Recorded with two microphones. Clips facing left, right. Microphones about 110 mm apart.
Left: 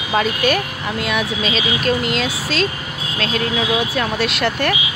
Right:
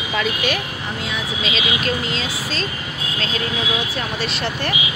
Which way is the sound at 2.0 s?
65° left (ahead or behind).